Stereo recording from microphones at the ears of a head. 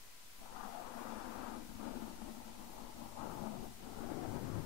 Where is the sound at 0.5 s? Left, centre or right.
Left.